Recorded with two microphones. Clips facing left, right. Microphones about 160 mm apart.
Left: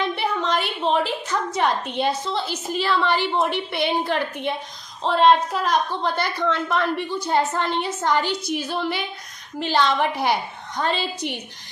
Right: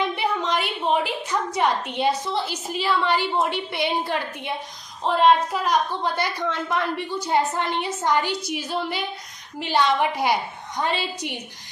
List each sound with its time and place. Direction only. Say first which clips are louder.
0.2 s a woman's voice: left 1 dB; 10° right (ahead or behind)